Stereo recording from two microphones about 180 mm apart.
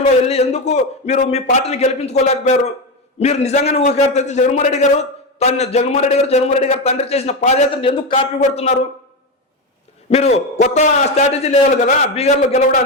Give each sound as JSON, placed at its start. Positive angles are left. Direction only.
{"t": 0.0, "sound": "a man's voice", "side_deg": 35}
{"t": 8.1, "sound": "a man's voice", "side_deg": 40}
{"t": 10.1, "sound": "a man's voice", "side_deg": 35}